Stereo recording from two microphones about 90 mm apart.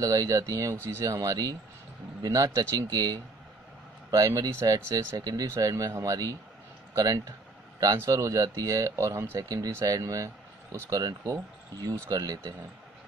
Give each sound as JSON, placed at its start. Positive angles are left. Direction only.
{"t": 0.0, "sound": "speech", "side_deg": -40}